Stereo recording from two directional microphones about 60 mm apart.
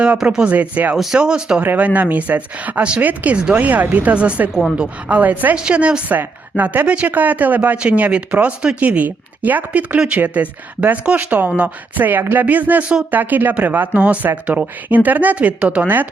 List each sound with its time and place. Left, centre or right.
0.3 s a woman's voice: right
0.9 s speech: centre
1.6 s a woman's voice: right